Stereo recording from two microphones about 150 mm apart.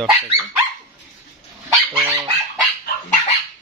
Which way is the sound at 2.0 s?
20° right (ahead or behind).